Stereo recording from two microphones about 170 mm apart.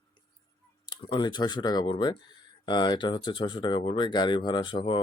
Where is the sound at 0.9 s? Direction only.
25° left (ahead or behind).